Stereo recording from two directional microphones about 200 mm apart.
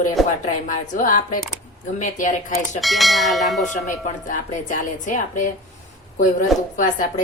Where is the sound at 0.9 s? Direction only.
40° left (ahead or behind).